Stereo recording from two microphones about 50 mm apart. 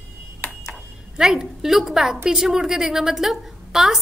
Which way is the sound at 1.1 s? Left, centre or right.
Centre.